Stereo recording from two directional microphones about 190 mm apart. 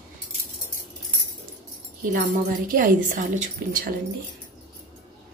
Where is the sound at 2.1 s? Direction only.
45° right (ahead or behind).